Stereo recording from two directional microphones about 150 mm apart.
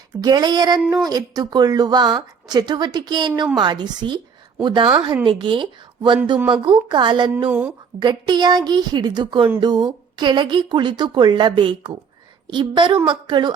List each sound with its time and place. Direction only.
0.2 s a woman's voice: 25° right (ahead or behind)